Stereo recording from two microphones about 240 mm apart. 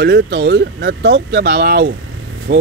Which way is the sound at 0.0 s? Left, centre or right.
Right.